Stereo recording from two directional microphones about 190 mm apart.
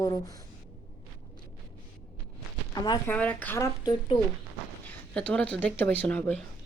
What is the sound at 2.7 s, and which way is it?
Speech, 20° left (ahead or behind).